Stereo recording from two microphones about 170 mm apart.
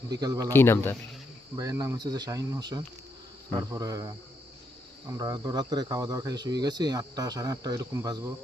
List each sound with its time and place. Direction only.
0.1 s speech: 20° right (ahead or behind)
0.5 s a man's voice: 15° left (ahead or behind)
1.5 s speech: 20° right (ahead or behind)